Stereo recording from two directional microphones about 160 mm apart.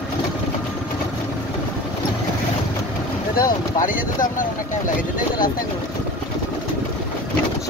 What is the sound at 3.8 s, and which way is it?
Speech, 55° left (ahead or behind).